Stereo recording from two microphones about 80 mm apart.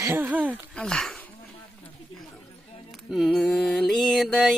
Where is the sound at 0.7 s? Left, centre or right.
Centre.